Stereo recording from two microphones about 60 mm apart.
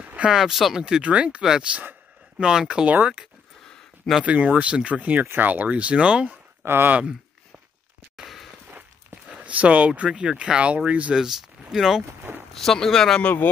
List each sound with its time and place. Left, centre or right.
0.0 s a sound: right
0.3 s speech: centre
2.3 s speech: centre
4.2 s speech: right
6.6 s speech: right
8.2 s a sound: centre
9.3 s speech: right
11.1 s speech: centre
12.5 s speech: centre
13.2 s speech: left